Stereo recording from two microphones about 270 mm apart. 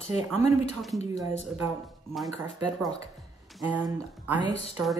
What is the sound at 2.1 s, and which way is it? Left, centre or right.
Speech, centre.